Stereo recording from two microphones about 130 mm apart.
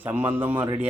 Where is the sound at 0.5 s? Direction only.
35° right (ahead or behind).